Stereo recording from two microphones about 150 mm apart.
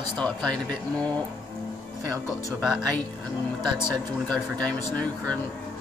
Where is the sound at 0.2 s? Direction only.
5° left (ahead or behind).